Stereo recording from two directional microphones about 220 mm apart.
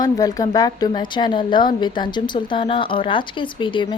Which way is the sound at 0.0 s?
15° left (ahead or behind).